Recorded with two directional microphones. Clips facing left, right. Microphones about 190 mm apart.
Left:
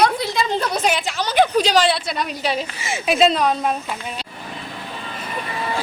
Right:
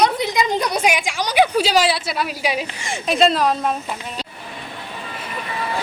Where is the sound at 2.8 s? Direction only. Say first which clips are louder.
Left 1 dB; 5° left (ahead or behind).